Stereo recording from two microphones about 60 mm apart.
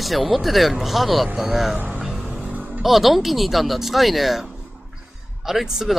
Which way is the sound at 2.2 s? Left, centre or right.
Centre.